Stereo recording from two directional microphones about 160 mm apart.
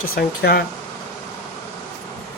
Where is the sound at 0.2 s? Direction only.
75° left (ahead or behind).